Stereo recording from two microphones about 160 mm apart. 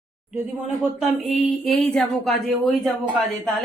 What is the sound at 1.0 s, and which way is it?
Speech, centre (ahead or behind).